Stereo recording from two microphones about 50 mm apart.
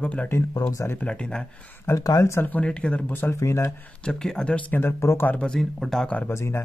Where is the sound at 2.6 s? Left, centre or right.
Left.